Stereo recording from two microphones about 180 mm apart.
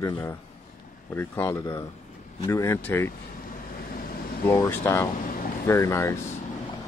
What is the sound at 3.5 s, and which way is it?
Vehicle, 55° left (ahead or behind).